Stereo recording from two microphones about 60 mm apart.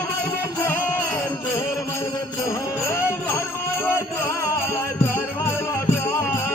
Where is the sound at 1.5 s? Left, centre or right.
Left.